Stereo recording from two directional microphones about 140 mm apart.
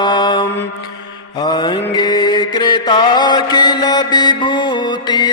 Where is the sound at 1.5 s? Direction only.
35° left (ahead or behind).